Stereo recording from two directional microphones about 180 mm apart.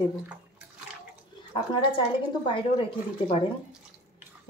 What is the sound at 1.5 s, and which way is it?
Speech, 25° left (ahead or behind).